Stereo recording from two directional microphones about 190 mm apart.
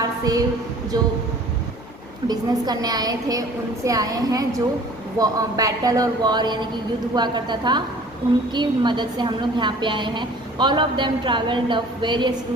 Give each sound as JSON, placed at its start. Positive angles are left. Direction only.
{"t": 0.0, "sound": "a sound", "side_deg": -20}
{"t": 0.9, "sound": "a woman's voice", "side_deg": -20}
{"t": 2.2, "sound": "a woman's voice", "side_deg": -20}